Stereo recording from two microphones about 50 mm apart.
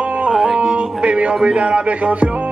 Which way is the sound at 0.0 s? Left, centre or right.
Right.